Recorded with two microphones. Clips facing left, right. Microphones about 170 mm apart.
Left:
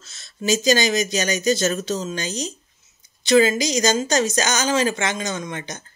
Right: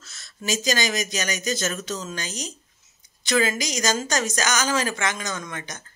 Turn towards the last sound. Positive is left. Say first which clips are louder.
# left 5 dB
turn(degrees=25)  # may be behind; listen again after turning